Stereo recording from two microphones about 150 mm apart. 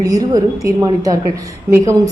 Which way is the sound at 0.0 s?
25° right (ahead or behind).